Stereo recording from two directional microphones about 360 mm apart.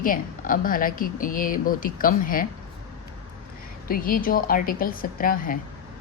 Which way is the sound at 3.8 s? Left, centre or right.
Left.